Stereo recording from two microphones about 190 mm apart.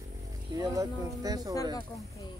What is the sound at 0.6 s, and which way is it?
Speech, 20° right (ahead or behind).